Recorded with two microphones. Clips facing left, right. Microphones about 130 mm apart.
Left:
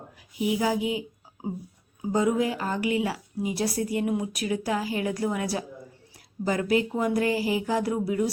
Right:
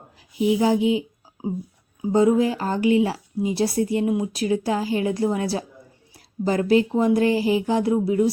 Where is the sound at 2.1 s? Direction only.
30° right (ahead or behind).